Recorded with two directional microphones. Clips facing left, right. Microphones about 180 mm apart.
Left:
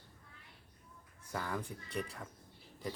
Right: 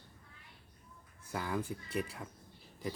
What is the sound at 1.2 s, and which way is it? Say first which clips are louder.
Speech: right 3 dB; 5° right (ahead or behind).